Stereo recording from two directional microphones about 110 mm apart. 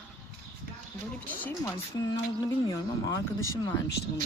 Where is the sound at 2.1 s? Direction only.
35° left (ahead or behind).